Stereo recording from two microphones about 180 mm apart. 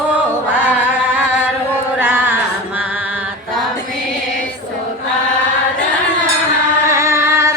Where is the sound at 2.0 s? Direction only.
10° right (ahead or behind).